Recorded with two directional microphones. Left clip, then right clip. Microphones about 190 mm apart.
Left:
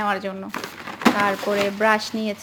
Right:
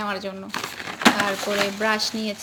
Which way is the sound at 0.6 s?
Centre (ahead or behind).